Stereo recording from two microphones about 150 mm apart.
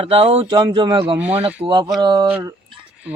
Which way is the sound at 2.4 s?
30° right (ahead or behind).